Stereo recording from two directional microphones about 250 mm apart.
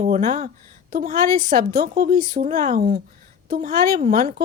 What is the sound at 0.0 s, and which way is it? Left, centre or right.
A woman's voice, right.